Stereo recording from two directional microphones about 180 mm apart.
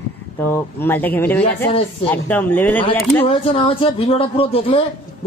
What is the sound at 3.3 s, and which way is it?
Speech, 30° left (ahead or behind).